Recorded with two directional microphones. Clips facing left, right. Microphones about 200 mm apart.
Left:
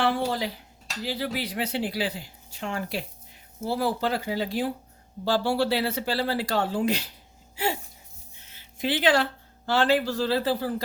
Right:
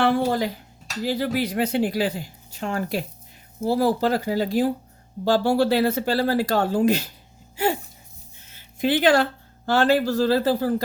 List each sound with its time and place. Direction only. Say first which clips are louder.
0.0 s speech: right 5 dB; 50° right (ahead or behind)
7.5 s a sound: right 5 dB; 50° right (ahead or behind)
8.4 s speech: right 6 dB; 50° right (ahead or behind)